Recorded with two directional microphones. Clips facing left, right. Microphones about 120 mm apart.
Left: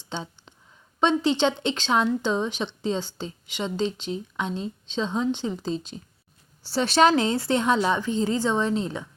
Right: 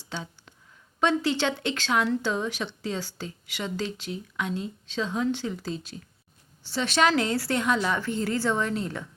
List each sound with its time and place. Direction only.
0.0 s a sound: 25° left (ahead or behind)
0.9 s speech: 20° left (ahead or behind)
6.6 s speech: 35° left (ahead or behind)